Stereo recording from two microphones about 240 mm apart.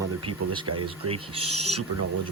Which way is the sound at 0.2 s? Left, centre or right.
Right.